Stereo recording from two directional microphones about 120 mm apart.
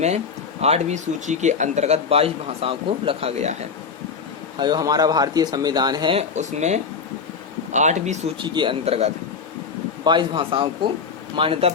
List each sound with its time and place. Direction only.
0.6 s a man's voice: 65° right (ahead or behind)
4.5 s speech: 35° right (ahead or behind)
6.1 s speech: 75° right (ahead or behind)
8.4 s speech: 40° right (ahead or behind); by 9.0 s 60° right (ahead or behind)
10.0 s speech: 40° right (ahead or behind)